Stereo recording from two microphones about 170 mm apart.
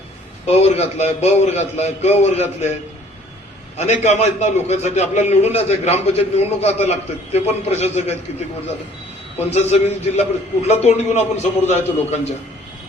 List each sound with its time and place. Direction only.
0.4 s a man's voice: 40° left (ahead or behind)
3.8 s a man's voice: 40° left (ahead or behind)